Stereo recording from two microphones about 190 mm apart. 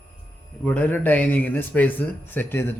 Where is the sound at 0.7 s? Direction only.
10° left (ahead or behind).